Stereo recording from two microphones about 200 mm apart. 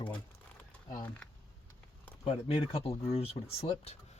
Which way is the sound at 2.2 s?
30° left (ahead or behind).